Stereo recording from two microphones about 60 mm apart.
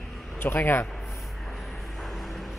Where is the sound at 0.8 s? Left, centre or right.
Centre.